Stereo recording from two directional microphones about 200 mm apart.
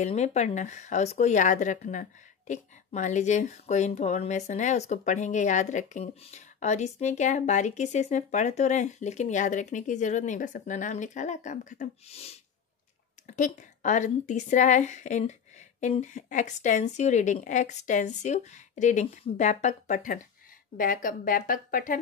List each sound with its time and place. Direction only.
0.0 s speech: 35° left (ahead or behind)